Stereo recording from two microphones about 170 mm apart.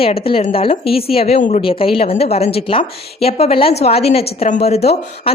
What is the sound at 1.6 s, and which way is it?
A woman's voice, 35° left (ahead or behind).